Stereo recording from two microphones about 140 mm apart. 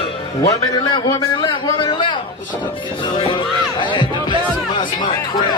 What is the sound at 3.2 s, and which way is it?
Music, 35° left (ahead or behind).